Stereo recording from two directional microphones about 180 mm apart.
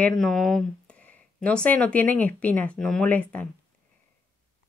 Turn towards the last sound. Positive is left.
turn(degrees=10)  # may be behind; listen again after turning